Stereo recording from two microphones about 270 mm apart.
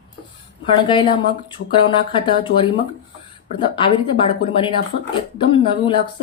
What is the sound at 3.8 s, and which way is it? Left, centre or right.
Speech, centre.